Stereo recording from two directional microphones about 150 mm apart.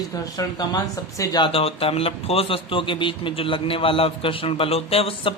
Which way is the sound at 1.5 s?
40° left (ahead or behind).